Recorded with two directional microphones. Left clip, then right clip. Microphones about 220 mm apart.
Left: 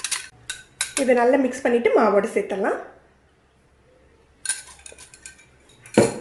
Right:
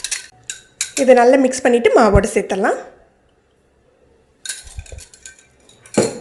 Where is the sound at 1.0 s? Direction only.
35° right (ahead or behind).